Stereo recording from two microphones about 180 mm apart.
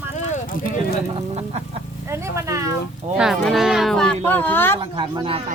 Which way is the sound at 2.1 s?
15° right (ahead or behind).